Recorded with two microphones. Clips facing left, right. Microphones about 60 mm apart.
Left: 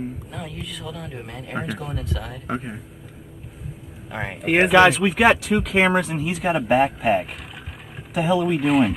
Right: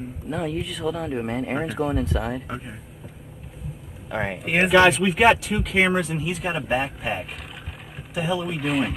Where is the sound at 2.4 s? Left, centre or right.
Left.